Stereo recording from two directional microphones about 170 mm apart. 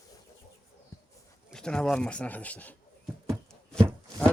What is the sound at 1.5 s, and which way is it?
Speech, 5° left (ahead or behind).